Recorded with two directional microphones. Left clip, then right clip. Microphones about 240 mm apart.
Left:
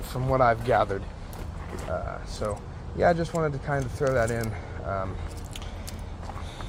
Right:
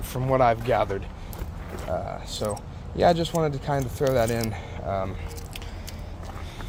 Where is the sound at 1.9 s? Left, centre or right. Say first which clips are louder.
Right 3 dB; right.